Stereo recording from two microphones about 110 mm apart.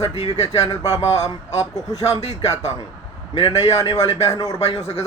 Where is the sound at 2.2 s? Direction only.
70° left (ahead or behind).